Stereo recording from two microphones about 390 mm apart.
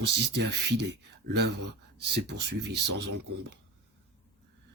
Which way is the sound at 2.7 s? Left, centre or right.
Right.